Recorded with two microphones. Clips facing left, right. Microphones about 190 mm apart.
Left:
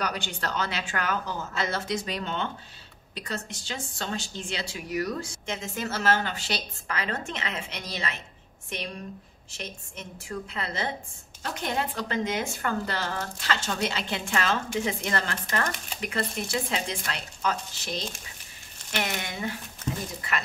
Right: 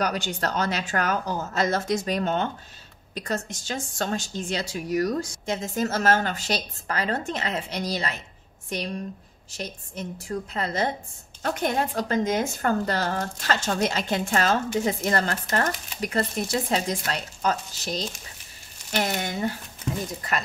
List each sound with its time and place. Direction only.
0.0 s a woman's voice: 40° right (ahead or behind)